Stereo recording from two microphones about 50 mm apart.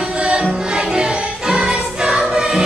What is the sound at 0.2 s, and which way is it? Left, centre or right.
Music, centre.